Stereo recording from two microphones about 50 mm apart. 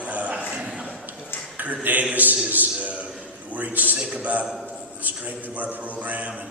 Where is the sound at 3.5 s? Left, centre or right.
Right.